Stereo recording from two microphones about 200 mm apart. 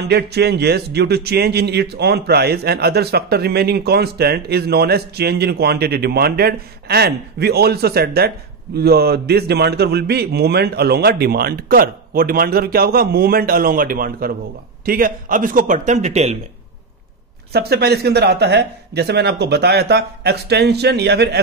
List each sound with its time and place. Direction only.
0.0 s speech: 55° right (ahead or behind); by 16.3 s 35° right (ahead or behind)
17.5 s speech: 55° right (ahead or behind)